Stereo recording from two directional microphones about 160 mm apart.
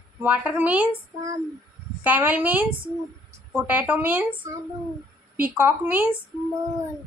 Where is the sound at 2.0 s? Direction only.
10° right (ahead or behind).